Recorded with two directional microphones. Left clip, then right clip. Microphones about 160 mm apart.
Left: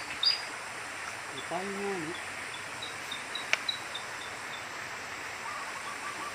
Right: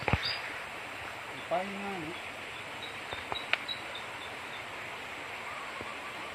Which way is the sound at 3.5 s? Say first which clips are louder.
Left 2 dB; 90° left.